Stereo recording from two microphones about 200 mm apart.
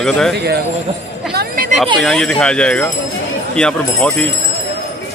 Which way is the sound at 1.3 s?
50° right (ahead or behind).